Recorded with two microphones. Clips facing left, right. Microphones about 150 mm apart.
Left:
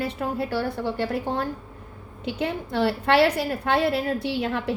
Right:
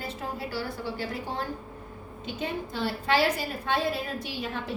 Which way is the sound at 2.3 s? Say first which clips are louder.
Left 7 dB; 70° left (ahead or behind).